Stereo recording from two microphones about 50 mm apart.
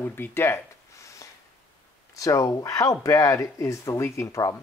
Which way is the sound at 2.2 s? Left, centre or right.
Left.